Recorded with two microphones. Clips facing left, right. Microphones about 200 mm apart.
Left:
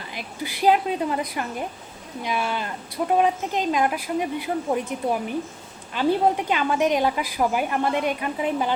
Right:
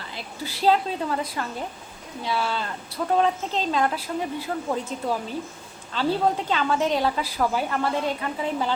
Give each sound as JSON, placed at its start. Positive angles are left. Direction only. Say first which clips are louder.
{"t": 0.1, "sound": "a woman's voice", "louder": "left 3 dB", "side_deg": 15}